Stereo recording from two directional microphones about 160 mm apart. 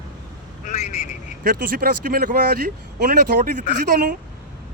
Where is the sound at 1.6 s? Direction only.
65° right (ahead or behind).